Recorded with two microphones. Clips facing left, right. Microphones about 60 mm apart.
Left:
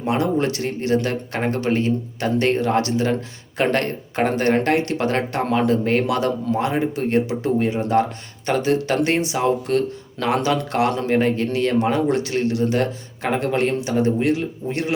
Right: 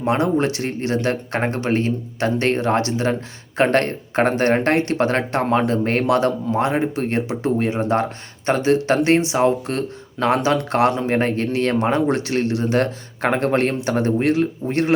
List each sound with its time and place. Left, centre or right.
0.0 s speech: right
5.4 s speech: right
5.6 s speech: right